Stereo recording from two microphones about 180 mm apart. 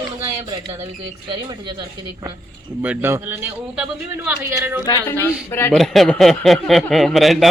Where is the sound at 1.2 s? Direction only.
25° right (ahead or behind).